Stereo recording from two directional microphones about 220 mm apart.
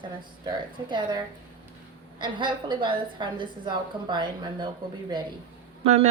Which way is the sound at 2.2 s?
20° right (ahead or behind).